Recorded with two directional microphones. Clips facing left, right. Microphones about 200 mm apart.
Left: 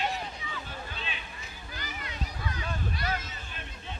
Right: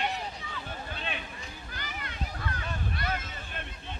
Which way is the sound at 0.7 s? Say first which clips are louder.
Right 2 dB; 55° right (ahead or behind).